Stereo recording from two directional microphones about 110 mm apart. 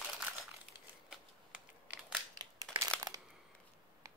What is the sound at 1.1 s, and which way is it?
Typing, 10° right (ahead or behind).